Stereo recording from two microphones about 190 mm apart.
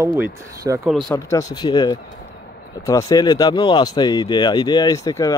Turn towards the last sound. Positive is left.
turn(degrees=20)  # may be behind; listen again after turning